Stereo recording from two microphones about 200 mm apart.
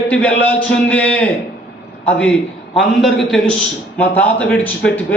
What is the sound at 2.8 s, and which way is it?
A man's voice, centre (ahead or behind).